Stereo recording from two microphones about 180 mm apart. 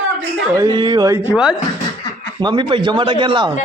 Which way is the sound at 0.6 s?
25° right (ahead or behind).